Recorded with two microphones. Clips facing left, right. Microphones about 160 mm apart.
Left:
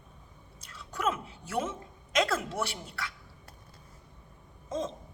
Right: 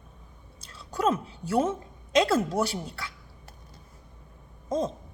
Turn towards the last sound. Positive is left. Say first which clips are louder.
# right 6 dB
turn(degrees=-35)  # may be behind; listen again after turning